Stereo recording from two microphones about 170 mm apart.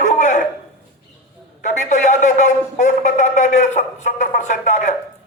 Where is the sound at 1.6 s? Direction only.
45° left (ahead or behind).